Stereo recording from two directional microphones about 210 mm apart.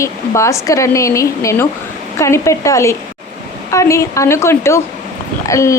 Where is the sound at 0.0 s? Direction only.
15° left (ahead or behind).